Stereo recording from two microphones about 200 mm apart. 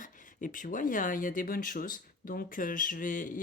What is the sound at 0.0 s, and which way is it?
Speech, 40° left (ahead or behind).